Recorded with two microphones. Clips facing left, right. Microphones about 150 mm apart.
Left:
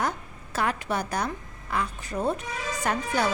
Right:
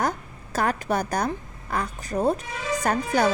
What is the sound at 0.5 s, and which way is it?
A woman's voice, 40° right (ahead or behind).